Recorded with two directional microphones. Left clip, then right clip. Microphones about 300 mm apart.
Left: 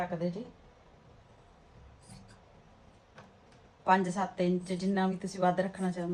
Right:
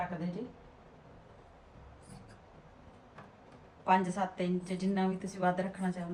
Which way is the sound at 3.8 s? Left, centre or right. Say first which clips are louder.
Left 2 dB; left.